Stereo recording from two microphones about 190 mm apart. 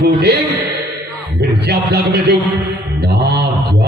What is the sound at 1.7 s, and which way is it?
Mantra, 60° right (ahead or behind).